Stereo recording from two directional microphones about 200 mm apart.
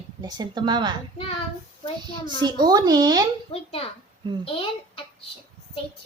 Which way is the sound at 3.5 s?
30° left (ahead or behind).